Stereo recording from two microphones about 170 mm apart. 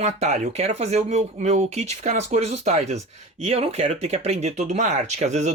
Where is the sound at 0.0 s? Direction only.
40° right (ahead or behind).